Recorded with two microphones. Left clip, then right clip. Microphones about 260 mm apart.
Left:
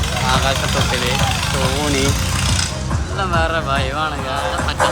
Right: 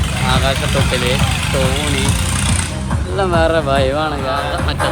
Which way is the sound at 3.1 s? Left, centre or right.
Centre.